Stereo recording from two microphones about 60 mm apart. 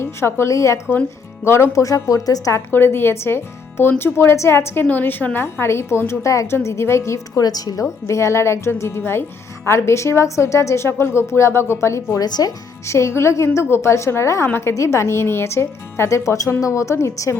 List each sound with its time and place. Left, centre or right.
0.0 s speech: left
1.5 s speech: left
1.7 s a woman's voice: left
2.7 s speech: left
4.9 s speech: left
6.1 s a woman's voice: left
7.3 s a woman's voice: left
8.0 s speech: left
10.8 s speech: left
12.2 s a woman's voice: left
12.8 s speech: left